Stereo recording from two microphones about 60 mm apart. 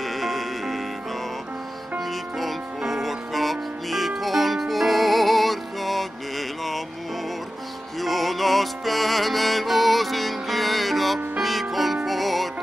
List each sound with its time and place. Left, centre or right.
0.0 s music: centre
2.0 s music: centre
8.0 s music: centre